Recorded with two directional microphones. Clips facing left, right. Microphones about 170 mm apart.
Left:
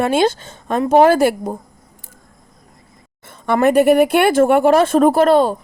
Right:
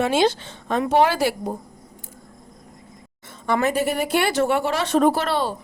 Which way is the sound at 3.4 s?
60° left (ahead or behind).